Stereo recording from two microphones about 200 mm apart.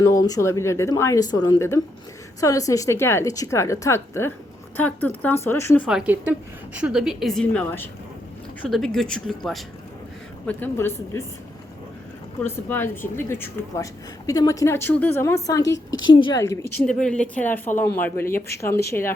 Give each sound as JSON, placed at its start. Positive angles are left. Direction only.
{"t": 0.2, "sound": "a woman's voice", "side_deg": 15}
{"t": 5.9, "sound": "a woman's voice", "side_deg": -5}
{"t": 12.4, "sound": "a woman's voice", "side_deg": 10}
{"t": 16.7, "sound": "a woman's voice", "side_deg": 5}